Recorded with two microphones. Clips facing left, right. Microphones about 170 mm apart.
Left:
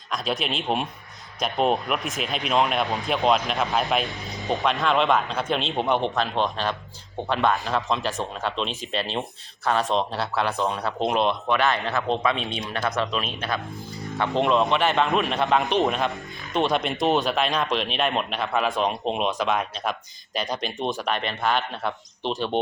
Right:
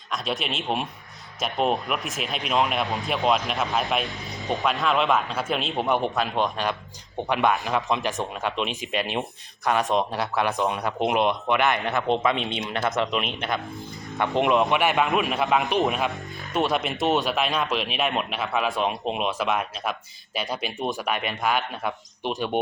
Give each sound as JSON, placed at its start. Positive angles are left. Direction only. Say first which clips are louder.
{"t": 0.1, "sound": "a man's voice", "louder": "left 2 dB", "side_deg": 0}
{"t": 13.6, "sound": "speech", "louder": "left 1 dB", "side_deg": 0}
{"t": 14.2, "sound": "a man's voice", "louder": "even", "side_deg": -15}